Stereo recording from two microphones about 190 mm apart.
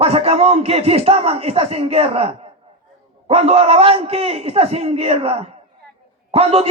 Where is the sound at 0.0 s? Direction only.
30° right (ahead or behind).